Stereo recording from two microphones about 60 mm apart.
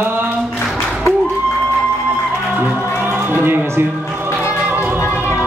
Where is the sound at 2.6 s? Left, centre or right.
Right.